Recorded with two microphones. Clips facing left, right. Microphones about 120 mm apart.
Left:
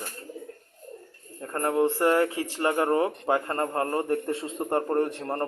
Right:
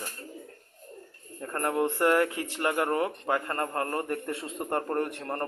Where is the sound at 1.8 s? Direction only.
30° left (ahead or behind).